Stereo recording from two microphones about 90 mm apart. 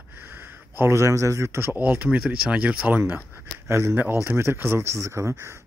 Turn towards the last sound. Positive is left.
turn(degrees=-30)  # may be behind; listen again after turning